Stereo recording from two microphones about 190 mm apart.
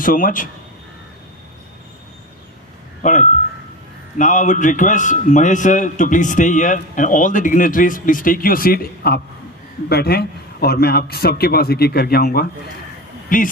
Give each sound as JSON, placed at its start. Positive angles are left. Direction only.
{"t": 0.0, "sound": "a man's voice", "side_deg": 45}
{"t": 3.0, "sound": "a man's voice", "side_deg": 40}